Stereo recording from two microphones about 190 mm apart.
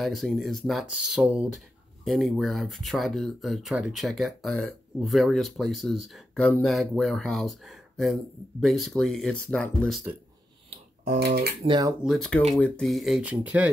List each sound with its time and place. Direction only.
0.0 s speech: centre (ahead or behind)
11.1 s speech: 55° right (ahead or behind)
11.6 s speech: 25° right (ahead or behind)
12.0 s speech: centre (ahead or behind)